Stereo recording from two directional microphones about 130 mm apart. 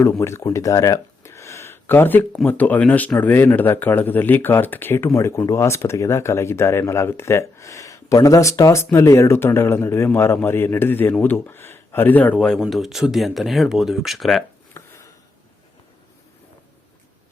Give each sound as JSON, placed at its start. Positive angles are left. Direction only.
{"t": 0.0, "sound": "speech", "side_deg": 20}
{"t": 14.7, "sound": "chopping", "side_deg": 20}